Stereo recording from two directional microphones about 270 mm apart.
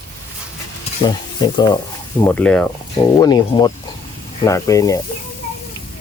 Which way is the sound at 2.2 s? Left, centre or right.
Centre.